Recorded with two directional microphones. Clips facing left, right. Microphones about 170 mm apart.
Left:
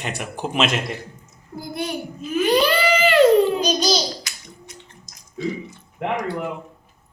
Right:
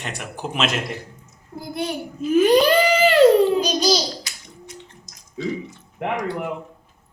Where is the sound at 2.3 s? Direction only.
45° right (ahead or behind).